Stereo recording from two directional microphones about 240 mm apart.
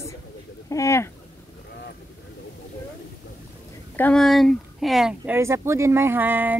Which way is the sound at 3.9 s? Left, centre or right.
Centre.